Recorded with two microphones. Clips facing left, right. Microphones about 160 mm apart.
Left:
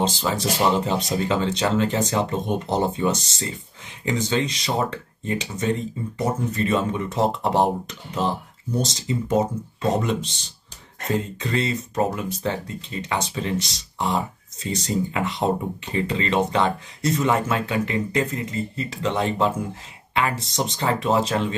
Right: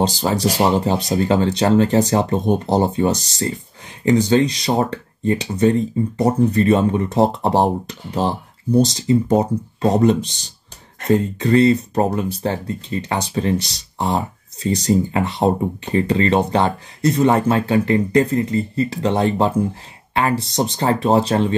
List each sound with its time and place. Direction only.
0.0 s speech: 35° right (ahead or behind)